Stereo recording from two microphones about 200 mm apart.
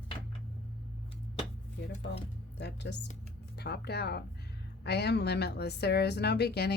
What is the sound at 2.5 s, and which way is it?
A woman's voice, 60° left (ahead or behind).